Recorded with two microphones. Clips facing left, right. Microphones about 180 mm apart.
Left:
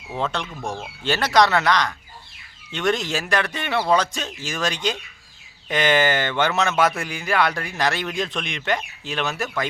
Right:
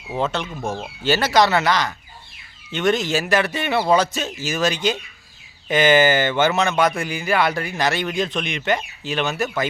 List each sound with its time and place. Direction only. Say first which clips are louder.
0.2 s speech: right 3 dB; 5° right (ahead or behind)